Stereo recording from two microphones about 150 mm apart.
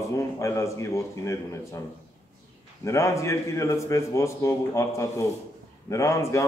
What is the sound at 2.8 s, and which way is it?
A man's voice, 20° left (ahead or behind).